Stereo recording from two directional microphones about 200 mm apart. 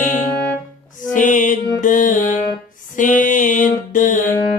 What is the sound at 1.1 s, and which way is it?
Music, 40° left (ahead or behind).